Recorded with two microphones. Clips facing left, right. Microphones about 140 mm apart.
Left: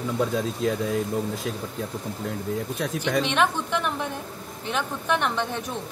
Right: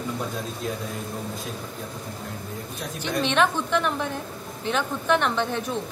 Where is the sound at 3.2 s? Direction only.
10° left (ahead or behind).